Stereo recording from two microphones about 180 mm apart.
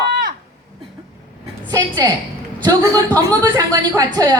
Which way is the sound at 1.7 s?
20° right (ahead or behind).